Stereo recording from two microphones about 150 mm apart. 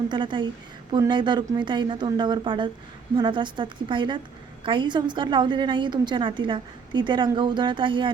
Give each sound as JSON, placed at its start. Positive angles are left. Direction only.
{"t": 0.1, "sound": "a woman's voice", "side_deg": -30}